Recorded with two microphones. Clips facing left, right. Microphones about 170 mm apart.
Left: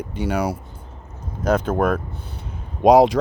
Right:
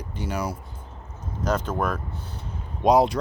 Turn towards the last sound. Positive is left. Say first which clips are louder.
# left 6 dB
turn(degrees=90)